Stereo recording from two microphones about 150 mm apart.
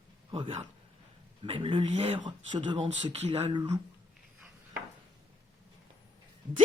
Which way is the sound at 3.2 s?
45° right (ahead or behind).